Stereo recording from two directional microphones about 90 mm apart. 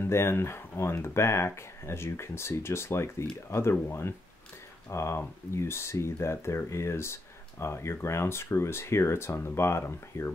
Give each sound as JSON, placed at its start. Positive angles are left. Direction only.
{"t": 0.0, "sound": "speech", "side_deg": 30}